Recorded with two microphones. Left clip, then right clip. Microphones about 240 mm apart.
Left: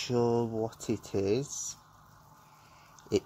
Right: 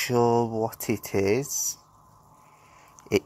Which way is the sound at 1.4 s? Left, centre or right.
Right.